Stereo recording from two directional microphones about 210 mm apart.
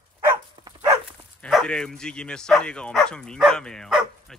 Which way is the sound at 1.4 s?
5° left (ahead or behind).